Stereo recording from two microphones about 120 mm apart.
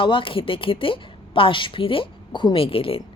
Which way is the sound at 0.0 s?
45° left (ahead or behind).